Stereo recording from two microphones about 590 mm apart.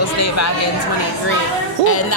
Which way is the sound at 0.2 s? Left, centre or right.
Left.